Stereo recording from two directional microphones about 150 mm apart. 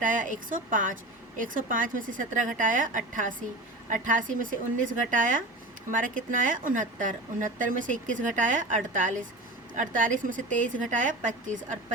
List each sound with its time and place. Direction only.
0.0 s a woman's voice: 60° right (ahead or behind)